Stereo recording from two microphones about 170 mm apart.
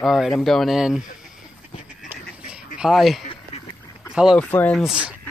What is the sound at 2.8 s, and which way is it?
Speech, centre (ahead or behind).